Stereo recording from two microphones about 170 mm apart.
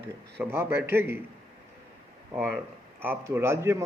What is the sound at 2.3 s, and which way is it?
A man's voice, 10° right (ahead or behind).